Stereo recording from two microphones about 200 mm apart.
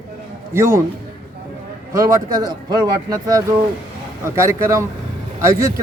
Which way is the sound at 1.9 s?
15° right (ahead or behind).